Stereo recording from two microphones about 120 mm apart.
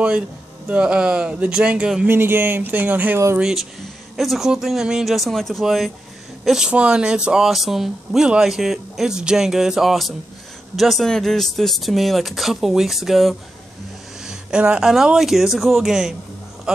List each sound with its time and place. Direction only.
0.7 s speech: 10° right (ahead or behind)
2.0 s speech: 20° right (ahead or behind)
3.3 s a man's voice: 5° right (ahead or behind)